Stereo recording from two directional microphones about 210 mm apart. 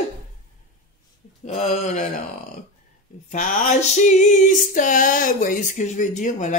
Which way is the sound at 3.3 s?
35° left (ahead or behind).